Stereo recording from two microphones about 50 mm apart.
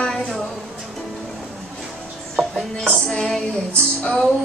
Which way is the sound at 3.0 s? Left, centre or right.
Centre.